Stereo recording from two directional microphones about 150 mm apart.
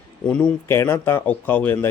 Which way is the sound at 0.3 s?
10° left (ahead or behind).